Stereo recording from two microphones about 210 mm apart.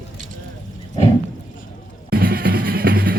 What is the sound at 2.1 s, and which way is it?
Music, 45° right (ahead or behind).